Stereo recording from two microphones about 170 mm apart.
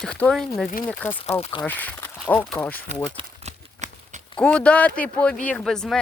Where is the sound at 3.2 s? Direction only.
40° right (ahead or behind).